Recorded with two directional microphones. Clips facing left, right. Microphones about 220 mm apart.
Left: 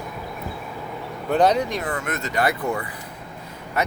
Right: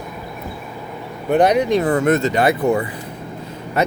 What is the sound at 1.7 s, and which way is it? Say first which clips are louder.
Speech: right 12 dB; 30° right (ahead or behind).